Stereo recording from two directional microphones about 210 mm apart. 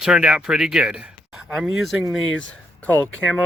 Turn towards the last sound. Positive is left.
turn(degrees=5)  # may be behind; listen again after turning